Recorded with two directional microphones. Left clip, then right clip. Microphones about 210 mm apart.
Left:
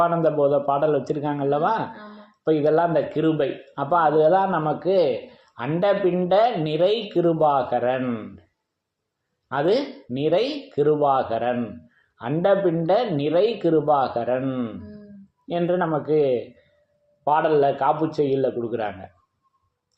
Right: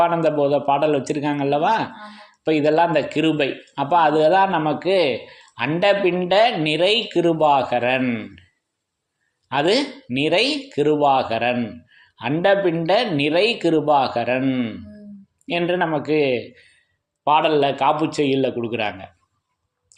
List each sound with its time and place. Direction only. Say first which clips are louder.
0.0 s a man's voice: right 2 dB; 20° right (ahead or behind)
9.5 s speech: right 3 dB; 20° right (ahead or behind)
15.4 s speech: right 2 dB; 20° right (ahead or behind)